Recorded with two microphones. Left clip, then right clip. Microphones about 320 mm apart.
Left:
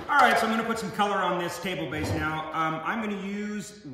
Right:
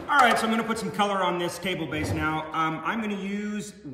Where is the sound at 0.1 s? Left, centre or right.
Centre.